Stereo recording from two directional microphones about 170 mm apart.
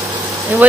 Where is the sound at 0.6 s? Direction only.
10° right (ahead or behind).